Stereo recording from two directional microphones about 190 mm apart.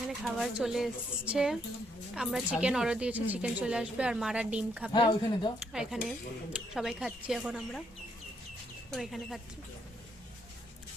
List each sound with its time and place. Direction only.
0.1 s a woman's voice: centre (ahead or behind)
4.9 s speech: 25° left (ahead or behind)
5.7 s a woman's voice: 5° right (ahead or behind)
8.9 s a woman's voice: centre (ahead or behind)